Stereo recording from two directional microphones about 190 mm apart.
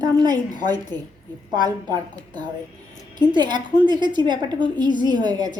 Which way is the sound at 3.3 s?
25° right (ahead or behind).